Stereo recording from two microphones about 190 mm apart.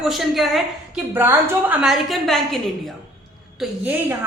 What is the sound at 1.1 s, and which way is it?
Speech, 10° right (ahead or behind).